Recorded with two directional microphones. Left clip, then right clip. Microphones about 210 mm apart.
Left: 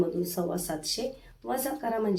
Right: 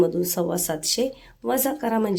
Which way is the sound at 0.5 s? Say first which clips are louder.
Right 7 dB; 55° right (ahead or behind).